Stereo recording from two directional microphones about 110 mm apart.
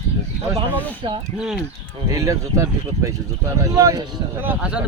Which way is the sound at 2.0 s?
30° right (ahead or behind).